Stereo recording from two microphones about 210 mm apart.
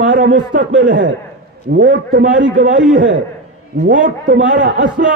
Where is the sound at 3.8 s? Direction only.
40° right (ahead or behind).